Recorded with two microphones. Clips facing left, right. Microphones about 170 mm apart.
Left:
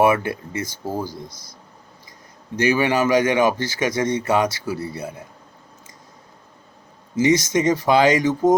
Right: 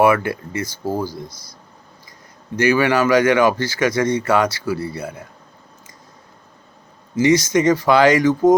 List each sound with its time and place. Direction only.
0.0 s a man's voice: 20° left (ahead or behind)
2.6 s a man's voice: 20° left (ahead or behind)
7.2 s a man's voice: 20° left (ahead or behind)